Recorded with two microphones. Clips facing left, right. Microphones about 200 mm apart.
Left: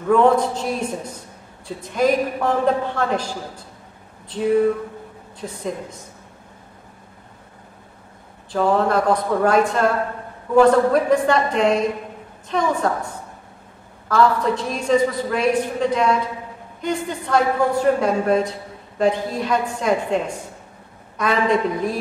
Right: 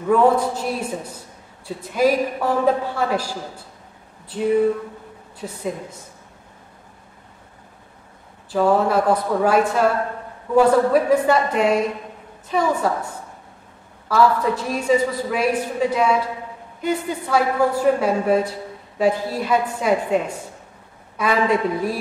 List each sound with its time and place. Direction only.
0.1 s a woman's voice: 5° right (ahead or behind)
5.4 s a woman's voice: 5° right (ahead or behind)
8.5 s a woman's voice: 5° right (ahead or behind)
14.0 s a woman's voice: 5° right (ahead or behind)